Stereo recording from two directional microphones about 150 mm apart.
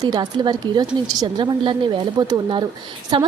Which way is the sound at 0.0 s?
30° right (ahead or behind).